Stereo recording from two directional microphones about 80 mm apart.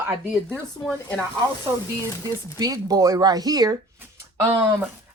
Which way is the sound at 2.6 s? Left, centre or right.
Right.